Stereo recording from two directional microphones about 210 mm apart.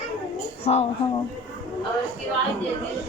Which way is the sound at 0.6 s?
30° left (ahead or behind).